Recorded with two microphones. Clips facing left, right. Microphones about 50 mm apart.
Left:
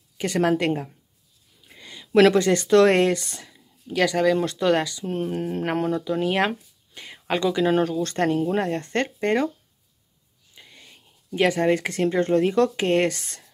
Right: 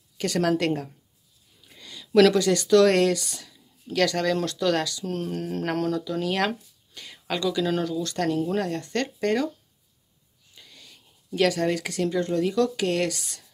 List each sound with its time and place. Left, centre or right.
0.2 s speech: left
3.8 s speech: centre
4.5 s speech: left
10.5 s a sound: left
11.3 s speech: left